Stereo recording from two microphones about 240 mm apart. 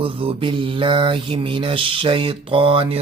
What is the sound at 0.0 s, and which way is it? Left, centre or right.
Mantra, right.